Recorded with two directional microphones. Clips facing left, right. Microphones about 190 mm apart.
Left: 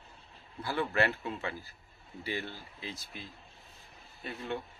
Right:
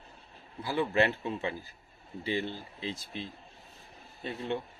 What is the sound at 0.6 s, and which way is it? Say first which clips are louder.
Speech: right 3 dB; 15° right (ahead or behind).